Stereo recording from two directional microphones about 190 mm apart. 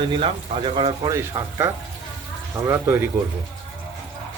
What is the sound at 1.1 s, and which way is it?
Speech, 15° right (ahead or behind).